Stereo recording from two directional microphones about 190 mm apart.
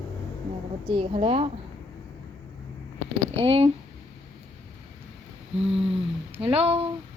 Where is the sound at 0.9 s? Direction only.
30° right (ahead or behind).